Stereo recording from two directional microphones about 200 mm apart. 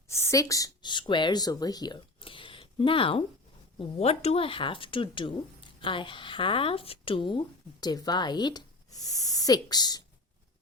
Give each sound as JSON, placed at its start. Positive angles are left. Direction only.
{"t": 0.1, "sound": "speech", "side_deg": 15}